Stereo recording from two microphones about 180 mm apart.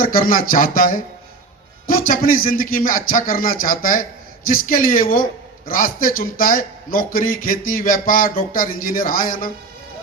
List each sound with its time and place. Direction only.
0.0 s a man's voice: 50° left (ahead or behind)